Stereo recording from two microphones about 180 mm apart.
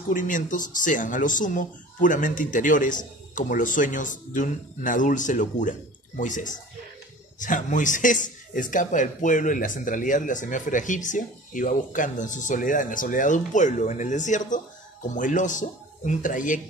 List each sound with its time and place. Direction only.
0.1 s a man's voice: 45° left (ahead or behind)